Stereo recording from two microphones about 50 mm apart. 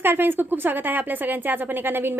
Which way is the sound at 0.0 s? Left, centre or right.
Right.